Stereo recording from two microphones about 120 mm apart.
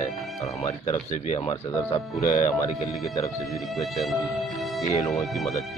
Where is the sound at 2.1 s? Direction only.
30° left (ahead or behind).